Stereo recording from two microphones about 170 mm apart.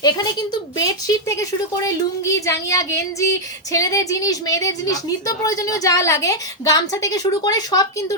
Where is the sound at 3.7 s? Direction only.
20° left (ahead or behind).